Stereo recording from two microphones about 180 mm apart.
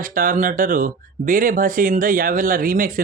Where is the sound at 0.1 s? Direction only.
50° right (ahead or behind).